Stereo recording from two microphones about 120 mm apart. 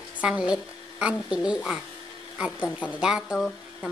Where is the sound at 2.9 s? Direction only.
5° right (ahead or behind).